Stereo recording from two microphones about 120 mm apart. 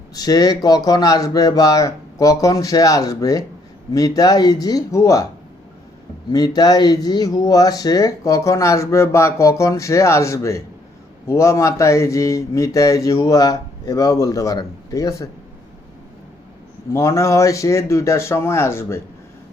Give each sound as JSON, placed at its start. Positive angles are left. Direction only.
{"t": 0.1, "sound": "speech", "side_deg": 30}
{"t": 6.3, "sound": "speech", "side_deg": 35}
{"t": 16.9, "sound": "speech", "side_deg": 25}